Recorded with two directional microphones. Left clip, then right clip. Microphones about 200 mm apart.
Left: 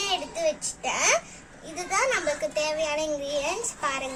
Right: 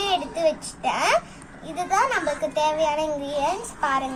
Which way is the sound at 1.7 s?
20° left (ahead or behind).